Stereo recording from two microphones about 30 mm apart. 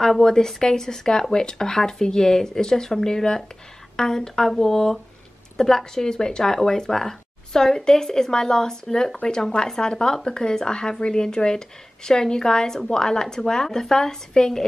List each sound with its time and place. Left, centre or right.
0.2 s a woman's voice: centre